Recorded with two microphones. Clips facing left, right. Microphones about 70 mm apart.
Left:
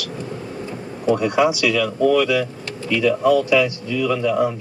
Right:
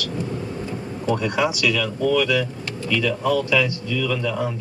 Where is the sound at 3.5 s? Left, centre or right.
Left.